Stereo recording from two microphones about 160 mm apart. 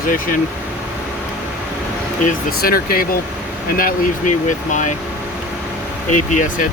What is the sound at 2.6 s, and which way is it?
Speech, 65° left (ahead or behind).